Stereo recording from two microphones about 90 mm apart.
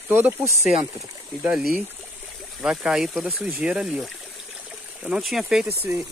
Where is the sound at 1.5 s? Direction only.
10° right (ahead or behind).